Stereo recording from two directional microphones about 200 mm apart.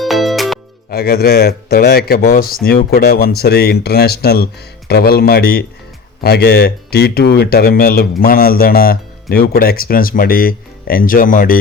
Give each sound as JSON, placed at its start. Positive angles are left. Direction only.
{"t": 0.0, "sound": "music", "side_deg": 0}
{"t": 0.9, "sound": "speech", "side_deg": 50}